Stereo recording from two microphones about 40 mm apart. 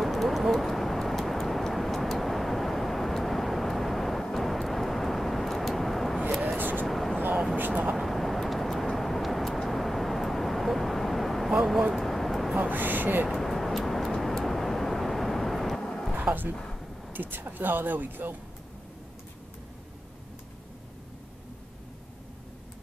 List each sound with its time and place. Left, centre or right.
0.0 s vehicle: centre
6.4 s a sound: right
6.9 s a sound: centre
7.5 s vehicle: right
7.9 s vehicle: centre
12.6 s gasp: right
13.3 s vehicle: centre
15.8 s a sound: centre
17.1 s speech: right